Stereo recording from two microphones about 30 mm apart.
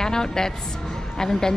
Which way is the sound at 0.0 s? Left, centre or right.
Left.